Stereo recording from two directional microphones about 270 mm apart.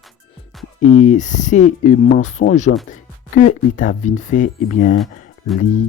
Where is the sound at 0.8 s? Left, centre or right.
Left.